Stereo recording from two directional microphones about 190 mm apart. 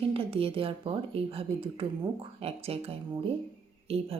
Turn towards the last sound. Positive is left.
turn(degrees=-30)  # may be behind; listen again after turning